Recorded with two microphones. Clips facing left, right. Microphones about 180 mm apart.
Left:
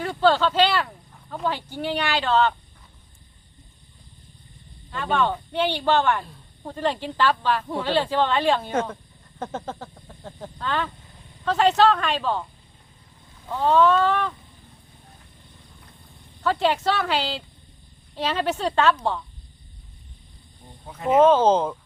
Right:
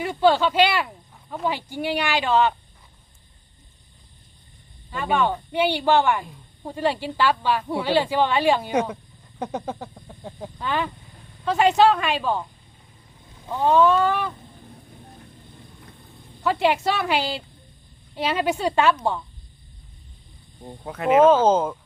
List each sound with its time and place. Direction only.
0.0 s speech: 10° right (ahead or behind)
4.9 s speech: 10° right (ahead or behind)
13.5 s speech: 15° right (ahead or behind)
16.4 s speech: 10° right (ahead or behind)
20.8 s speech: 70° right (ahead or behind)
21.1 s speech: 10° right (ahead or behind)